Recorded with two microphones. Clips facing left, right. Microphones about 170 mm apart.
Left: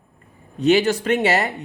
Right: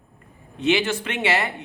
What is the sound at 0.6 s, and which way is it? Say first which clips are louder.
Speech: left 5 dB; 40° left (ahead or behind).